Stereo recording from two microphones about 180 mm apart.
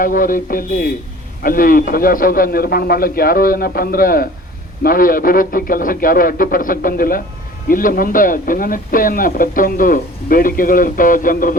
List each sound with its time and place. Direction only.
0.0 s a man's voice: 50° left (ahead or behind)